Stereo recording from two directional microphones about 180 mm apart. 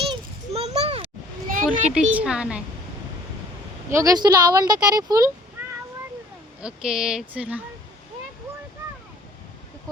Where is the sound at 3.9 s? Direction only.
20° right (ahead or behind).